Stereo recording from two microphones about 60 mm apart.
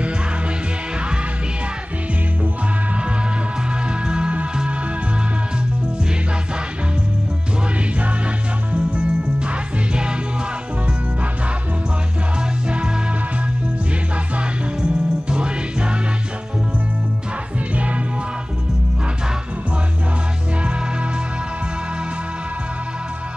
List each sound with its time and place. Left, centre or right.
4.0 s music: centre
8.7 s music: centre
12.4 s music: centre
14.3 s music: centre